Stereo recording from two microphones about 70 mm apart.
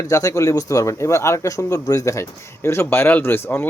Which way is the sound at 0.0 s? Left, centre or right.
Left.